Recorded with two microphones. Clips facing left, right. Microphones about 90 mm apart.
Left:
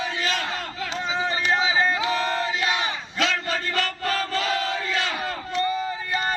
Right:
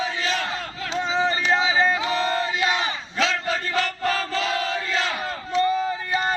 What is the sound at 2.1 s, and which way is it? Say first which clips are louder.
Chant: right 1 dB; 5° left (ahead or behind).